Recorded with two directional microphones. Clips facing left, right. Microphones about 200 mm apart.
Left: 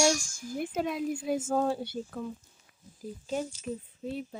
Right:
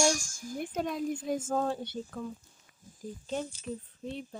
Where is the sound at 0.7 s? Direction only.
5° left (ahead or behind).